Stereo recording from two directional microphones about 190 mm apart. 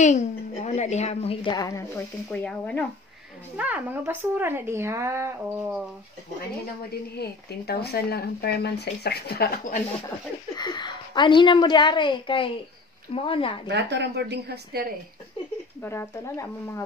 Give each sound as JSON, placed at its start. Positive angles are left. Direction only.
{"t": 0.0, "sound": "a woman's voice", "side_deg": 35}
{"t": 3.5, "sound": "speech", "side_deg": -10}
{"t": 6.9, "sound": "speech", "side_deg": 55}
{"t": 10.5, "sound": "a woman's voice", "side_deg": 25}
{"t": 13.7, "sound": "a woman's voice", "side_deg": -65}
{"t": 15.8, "sound": "speech", "side_deg": 10}